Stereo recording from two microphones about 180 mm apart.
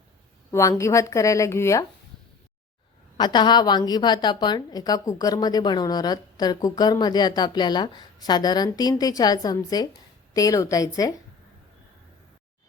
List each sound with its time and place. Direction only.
0.5 s speech: 15° left (ahead or behind)
3.2 s a woman's voice: 25° left (ahead or behind)